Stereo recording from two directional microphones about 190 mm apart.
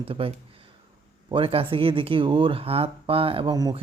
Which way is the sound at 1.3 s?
30° right (ahead or behind).